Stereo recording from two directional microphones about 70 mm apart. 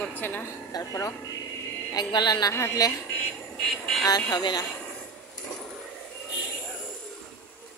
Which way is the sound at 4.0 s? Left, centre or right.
Left.